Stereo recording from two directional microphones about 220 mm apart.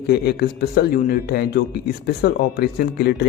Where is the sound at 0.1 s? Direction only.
45° left (ahead or behind).